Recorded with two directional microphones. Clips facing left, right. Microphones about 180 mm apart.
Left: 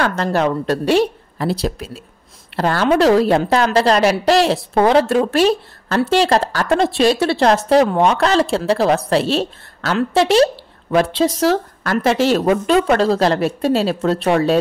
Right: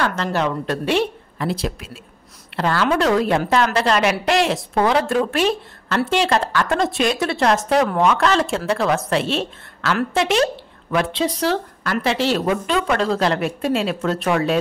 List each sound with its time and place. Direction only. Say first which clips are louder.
0.1 s a woman's voice: left 4 dB; 45° left (ahead or behind)